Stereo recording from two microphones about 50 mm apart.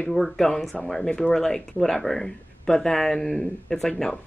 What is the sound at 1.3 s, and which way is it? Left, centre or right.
Speech, centre.